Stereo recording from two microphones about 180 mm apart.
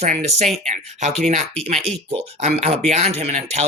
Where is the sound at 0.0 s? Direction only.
40° right (ahead or behind).